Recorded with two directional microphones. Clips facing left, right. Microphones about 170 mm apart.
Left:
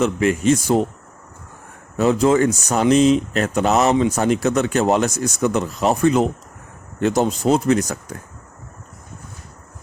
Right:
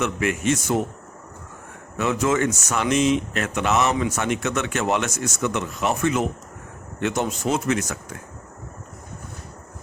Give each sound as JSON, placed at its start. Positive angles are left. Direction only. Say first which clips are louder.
{"t": 0.0, "sound": "speech", "louder": "left 6 dB", "side_deg": 30}
{"t": 2.0, "sound": "speech", "louder": "left 6 dB", "side_deg": 35}